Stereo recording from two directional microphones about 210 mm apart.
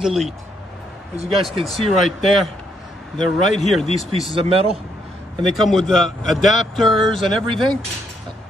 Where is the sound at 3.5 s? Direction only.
Centre (ahead or behind).